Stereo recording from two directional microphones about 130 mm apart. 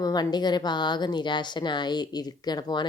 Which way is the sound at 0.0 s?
30° left (ahead or behind).